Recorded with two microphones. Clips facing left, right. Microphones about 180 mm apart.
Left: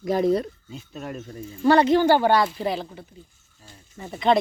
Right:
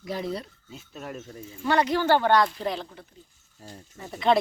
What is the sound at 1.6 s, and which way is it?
Speech, 30° left (ahead or behind).